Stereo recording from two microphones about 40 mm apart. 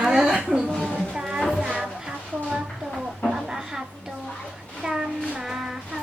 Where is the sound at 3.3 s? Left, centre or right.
Centre.